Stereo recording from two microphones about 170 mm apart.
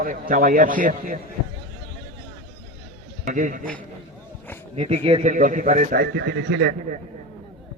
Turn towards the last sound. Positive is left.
turn(degrees=-80)